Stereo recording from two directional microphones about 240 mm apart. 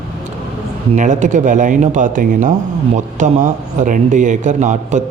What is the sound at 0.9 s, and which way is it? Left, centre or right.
Speech, right.